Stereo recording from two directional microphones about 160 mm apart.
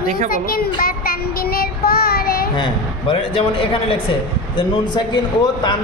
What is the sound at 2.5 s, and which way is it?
A man's voice, 30° left (ahead or behind).